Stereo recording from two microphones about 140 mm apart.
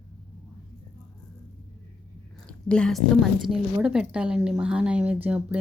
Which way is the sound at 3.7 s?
10° right (ahead or behind).